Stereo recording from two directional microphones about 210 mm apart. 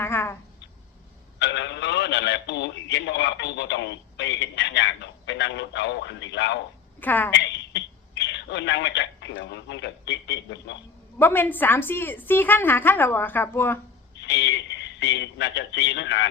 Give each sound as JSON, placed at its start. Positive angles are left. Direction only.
{"t": 0.0, "sound": "a sound", "side_deg": 10}
{"t": 1.4, "sound": "speech", "side_deg": 55}
{"t": 7.0, "sound": "a woman's voice", "side_deg": 10}
{"t": 7.3, "sound": "a man's voice", "side_deg": 55}
{"t": 11.2, "sound": "a woman's voice", "side_deg": 10}
{"t": 14.2, "sound": "a man's voice", "side_deg": 55}